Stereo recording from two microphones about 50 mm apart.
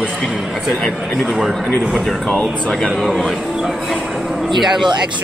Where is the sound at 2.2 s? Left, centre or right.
Centre.